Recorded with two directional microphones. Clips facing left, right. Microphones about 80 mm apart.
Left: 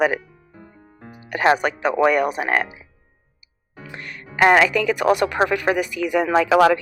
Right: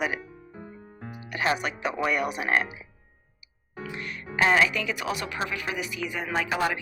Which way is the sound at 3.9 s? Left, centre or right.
Left.